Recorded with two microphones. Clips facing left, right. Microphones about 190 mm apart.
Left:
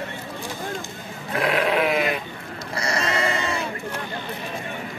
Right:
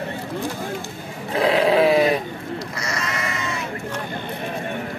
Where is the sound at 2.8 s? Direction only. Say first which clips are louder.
Left 8 dB; 30° left (ahead or behind).